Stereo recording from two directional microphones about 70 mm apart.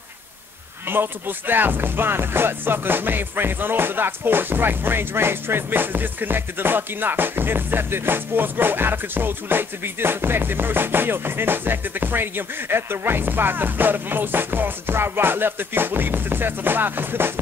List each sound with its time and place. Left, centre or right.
0.8 s speech: right